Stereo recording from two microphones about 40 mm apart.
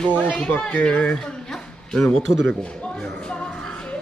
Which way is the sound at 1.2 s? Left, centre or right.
Centre.